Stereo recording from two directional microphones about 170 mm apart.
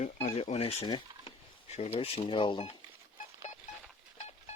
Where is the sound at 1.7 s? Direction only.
40° left (ahead or behind).